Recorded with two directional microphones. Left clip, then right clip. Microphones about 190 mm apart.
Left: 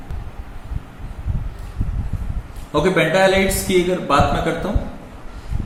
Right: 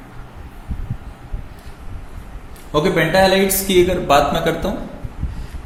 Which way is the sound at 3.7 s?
55° right (ahead or behind).